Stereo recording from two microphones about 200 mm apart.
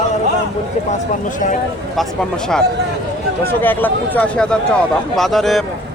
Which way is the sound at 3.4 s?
10° left (ahead or behind).